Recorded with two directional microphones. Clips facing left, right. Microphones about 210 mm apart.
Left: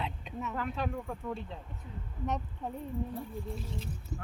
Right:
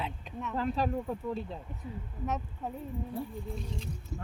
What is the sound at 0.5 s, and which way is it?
Speech, 30° right (ahead or behind).